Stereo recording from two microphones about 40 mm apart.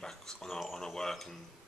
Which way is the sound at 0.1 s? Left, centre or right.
Centre.